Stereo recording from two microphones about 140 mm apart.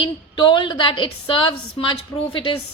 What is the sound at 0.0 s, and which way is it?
A woman's voice, 35° left (ahead or behind).